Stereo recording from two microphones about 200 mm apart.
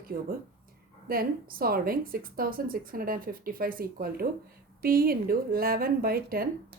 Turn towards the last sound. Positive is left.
turn(degrees=-50)  # may be behind; listen again after turning